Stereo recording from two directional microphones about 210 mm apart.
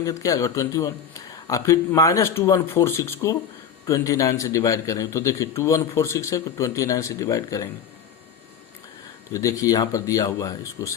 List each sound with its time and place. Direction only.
0.0 s speech: 15° left (ahead or behind)
9.3 s speech: 15° left (ahead or behind)